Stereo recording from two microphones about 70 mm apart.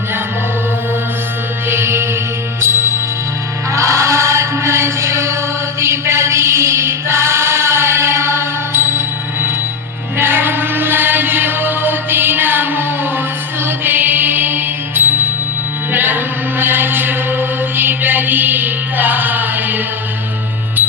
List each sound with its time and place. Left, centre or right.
1.7 s music: right
3.7 s chant: right
5.8 s choir: right
10.2 s music: right
15.9 s mantra: right